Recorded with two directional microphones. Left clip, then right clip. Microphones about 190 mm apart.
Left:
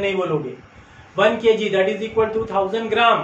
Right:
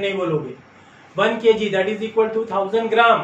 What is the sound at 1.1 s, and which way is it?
A man's voice, 10° left (ahead or behind).